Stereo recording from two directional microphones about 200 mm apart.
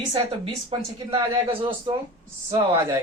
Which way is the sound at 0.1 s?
25° right (ahead or behind).